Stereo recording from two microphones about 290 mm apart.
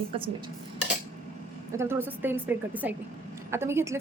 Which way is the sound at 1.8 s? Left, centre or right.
Centre.